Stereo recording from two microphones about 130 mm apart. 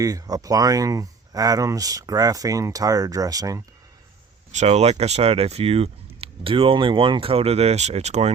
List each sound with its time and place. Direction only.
0.0 s speech: 30° right (ahead or behind)
4.5 s speech: 55° right (ahead or behind)